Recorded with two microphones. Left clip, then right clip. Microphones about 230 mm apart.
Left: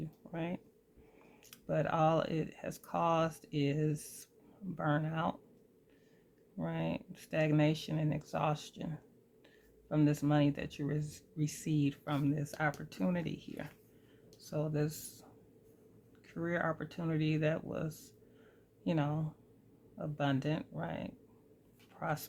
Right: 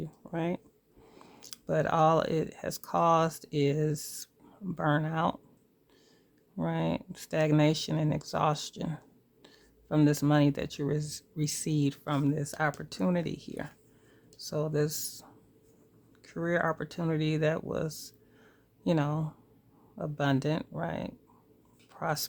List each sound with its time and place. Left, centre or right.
0.2 s a sound: right
1.1 s speech: right
6.6 s speech: right